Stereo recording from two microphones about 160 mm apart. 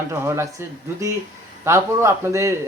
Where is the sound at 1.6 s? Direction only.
15° right (ahead or behind).